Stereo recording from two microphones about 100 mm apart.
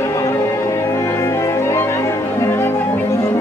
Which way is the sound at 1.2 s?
30° left (ahead or behind).